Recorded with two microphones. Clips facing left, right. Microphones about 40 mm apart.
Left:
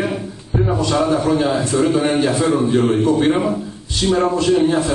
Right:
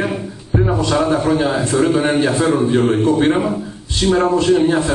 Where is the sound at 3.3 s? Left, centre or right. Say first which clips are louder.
Even; centre.